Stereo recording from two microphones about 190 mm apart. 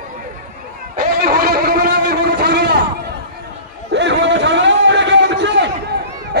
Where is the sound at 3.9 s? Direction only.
70° right (ahead or behind).